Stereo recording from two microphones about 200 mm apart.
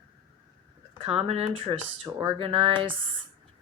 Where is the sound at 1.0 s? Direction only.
30° right (ahead or behind).